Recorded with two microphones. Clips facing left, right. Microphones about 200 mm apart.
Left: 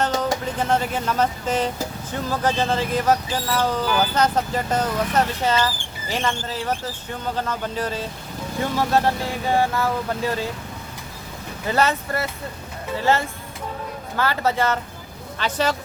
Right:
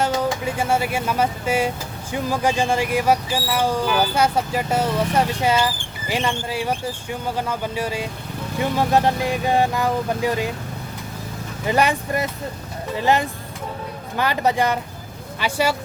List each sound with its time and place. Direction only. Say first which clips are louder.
0.0 s speech: right 1 dB; 10° right (ahead or behind)
11.6 s speech: right 2 dB; 15° right (ahead or behind)